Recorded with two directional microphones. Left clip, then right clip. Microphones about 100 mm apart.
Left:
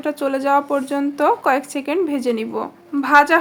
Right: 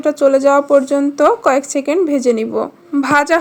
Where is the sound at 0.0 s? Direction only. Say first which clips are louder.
Right 9 dB; 35° right (ahead or behind).